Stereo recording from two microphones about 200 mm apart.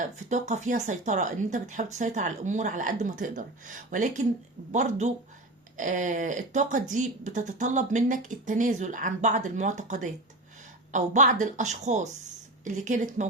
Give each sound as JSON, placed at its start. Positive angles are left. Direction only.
{"t": 0.0, "sound": "speech", "side_deg": -35}